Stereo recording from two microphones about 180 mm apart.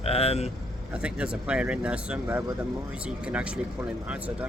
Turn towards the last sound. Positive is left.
turn(degrees=-5)  # may be behind; listen again after turning